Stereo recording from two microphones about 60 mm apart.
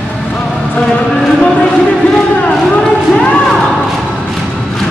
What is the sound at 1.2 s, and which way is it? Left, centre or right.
Speech, centre.